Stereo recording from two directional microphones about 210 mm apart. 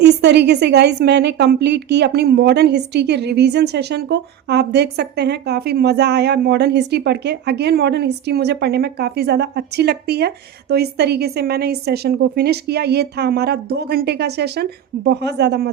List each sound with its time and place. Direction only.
0.0 s a woman's voice: 55° right (ahead or behind)